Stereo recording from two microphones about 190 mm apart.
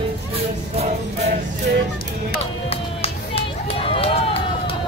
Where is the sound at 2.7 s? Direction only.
30° left (ahead or behind).